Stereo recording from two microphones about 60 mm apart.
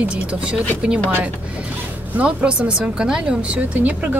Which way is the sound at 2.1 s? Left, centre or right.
Centre.